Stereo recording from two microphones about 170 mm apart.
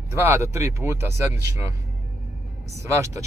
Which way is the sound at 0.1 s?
15° right (ahead or behind).